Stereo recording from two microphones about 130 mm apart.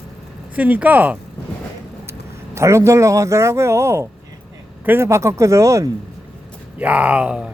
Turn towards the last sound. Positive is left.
turn(degrees=-10)  # may be behind; listen again after turning